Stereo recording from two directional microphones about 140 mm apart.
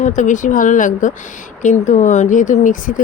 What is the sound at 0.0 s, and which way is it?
Speech, 65° left (ahead or behind).